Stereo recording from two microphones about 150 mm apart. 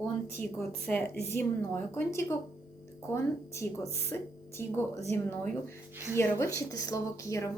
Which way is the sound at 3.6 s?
15° left (ahead or behind).